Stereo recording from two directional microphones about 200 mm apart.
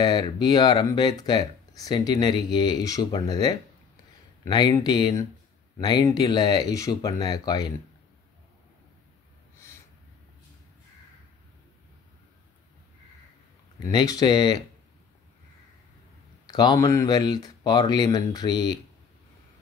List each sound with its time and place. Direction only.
0.0 s speech: 20° left (ahead or behind)
13.8 s speech: 20° left (ahead or behind)
16.4 s speech: 20° left (ahead or behind)